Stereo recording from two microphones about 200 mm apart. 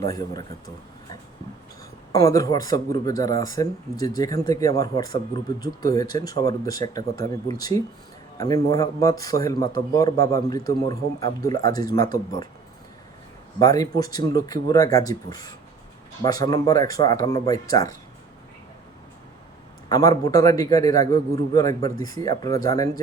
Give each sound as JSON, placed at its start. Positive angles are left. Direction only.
{"t": 0.0, "sound": "speech", "side_deg": 20}
{"t": 2.1, "sound": "speech", "side_deg": 15}
{"t": 13.6, "sound": "speech", "side_deg": 15}
{"t": 19.9, "sound": "speech", "side_deg": 20}